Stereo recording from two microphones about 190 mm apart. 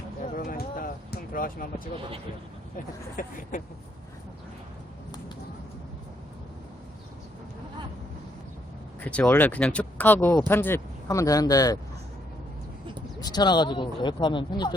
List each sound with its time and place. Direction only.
0.3 s a sound: 50° left (ahead or behind)
3.2 s speech: 45° left (ahead or behind)
9.0 s speech: 5° left (ahead or behind)
13.1 s speech: 20° left (ahead or behind)